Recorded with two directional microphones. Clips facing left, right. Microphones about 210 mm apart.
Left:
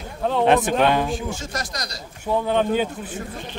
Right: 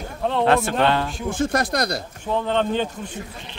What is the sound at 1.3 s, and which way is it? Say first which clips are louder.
Speech: right 9 dB; 55° right (ahead or behind).